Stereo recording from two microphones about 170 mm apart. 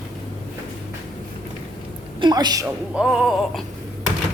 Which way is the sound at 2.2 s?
25° right (ahead or behind).